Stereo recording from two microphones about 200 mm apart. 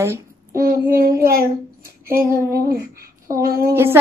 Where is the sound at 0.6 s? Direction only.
45° right (ahead or behind).